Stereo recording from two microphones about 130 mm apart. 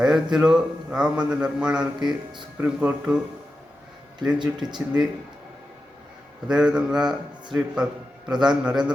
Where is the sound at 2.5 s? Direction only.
15° right (ahead or behind).